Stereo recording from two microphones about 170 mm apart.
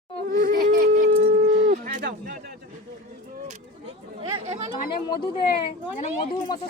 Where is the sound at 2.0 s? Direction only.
80° right; by 2.6 s 65° right (ahead or behind).